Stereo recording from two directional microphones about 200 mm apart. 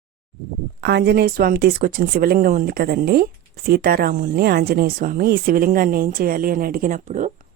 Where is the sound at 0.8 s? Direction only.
55° right (ahead or behind).